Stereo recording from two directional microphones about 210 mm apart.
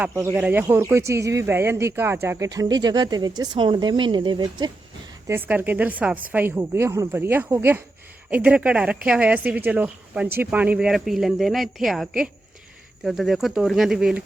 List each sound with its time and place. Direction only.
0.0 s speech: 10° right (ahead or behind)
5.3 s speech: 10° right (ahead or behind)